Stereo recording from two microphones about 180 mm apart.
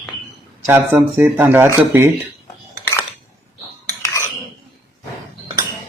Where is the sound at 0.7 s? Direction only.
15° right (ahead or behind).